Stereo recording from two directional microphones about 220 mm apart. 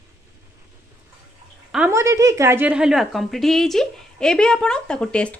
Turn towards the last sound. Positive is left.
turn(degrees=5)  # may be behind; listen again after turning